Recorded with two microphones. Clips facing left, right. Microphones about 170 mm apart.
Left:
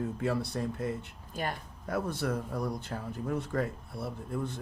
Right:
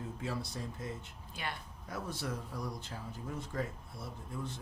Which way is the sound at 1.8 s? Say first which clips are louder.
Left 8 dB; 60° left (ahead or behind).